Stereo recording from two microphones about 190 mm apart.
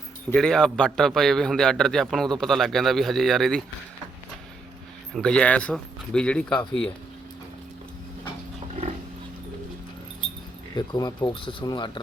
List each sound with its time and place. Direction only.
0.3 s a man's voice: 5° left (ahead or behind)
5.1 s a man's voice: 5° left (ahead or behind)
10.8 s speech: 20° left (ahead or behind)